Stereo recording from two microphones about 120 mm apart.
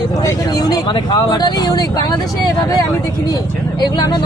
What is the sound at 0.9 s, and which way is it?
Speech, 40° left (ahead or behind).